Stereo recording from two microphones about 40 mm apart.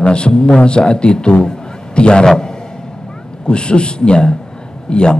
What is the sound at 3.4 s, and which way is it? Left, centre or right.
A man's voice, left.